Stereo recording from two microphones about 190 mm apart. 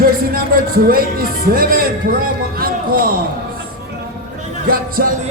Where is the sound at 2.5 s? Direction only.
50° right (ahead or behind).